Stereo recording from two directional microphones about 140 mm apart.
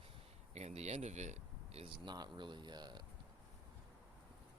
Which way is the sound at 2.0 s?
30° right (ahead or behind).